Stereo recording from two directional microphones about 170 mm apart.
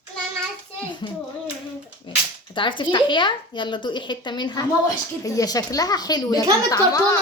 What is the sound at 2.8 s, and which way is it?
A child's voice, 30° left (ahead or behind).